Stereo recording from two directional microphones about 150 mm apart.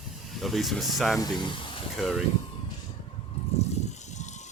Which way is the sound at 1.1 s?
30° left (ahead or behind).